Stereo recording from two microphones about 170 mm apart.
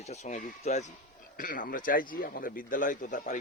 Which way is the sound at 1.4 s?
55° left (ahead or behind).